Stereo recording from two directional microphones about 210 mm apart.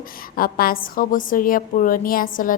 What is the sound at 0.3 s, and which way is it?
A woman's voice, 45° left (ahead or behind).